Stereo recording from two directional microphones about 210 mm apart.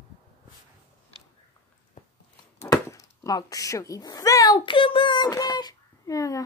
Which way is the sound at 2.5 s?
15° left (ahead or behind).